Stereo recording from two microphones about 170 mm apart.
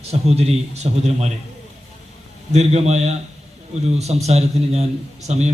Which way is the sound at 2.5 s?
40° right (ahead or behind).